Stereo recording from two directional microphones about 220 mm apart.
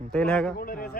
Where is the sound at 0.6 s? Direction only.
40° left (ahead or behind).